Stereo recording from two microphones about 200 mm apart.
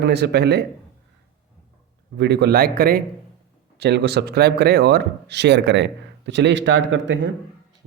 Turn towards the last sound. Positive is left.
turn(degrees=-65)  # may be behind; listen again after turning